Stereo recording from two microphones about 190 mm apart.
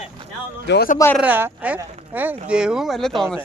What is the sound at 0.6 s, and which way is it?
Speech, 65° left (ahead or behind).